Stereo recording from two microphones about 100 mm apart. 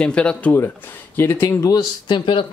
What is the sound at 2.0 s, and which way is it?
Speech, 55° left (ahead or behind).